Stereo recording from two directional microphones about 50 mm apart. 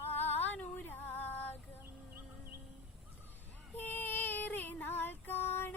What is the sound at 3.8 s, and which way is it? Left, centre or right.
Child singing, left.